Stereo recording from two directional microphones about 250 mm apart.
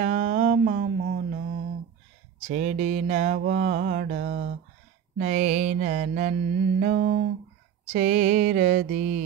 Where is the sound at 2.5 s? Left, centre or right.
Right.